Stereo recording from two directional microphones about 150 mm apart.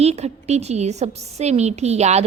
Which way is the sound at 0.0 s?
45° right (ahead or behind).